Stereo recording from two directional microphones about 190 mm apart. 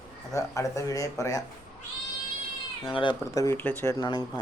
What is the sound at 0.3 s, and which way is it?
Speech, 15° left (ahead or behind).